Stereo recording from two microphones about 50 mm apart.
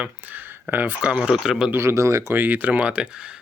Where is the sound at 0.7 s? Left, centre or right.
Right.